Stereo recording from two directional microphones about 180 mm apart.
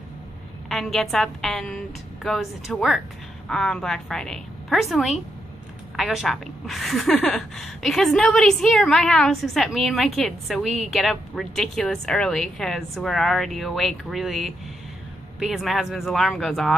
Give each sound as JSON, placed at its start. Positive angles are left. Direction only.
{"t": 0.7, "sound": "a woman's voice", "side_deg": 0}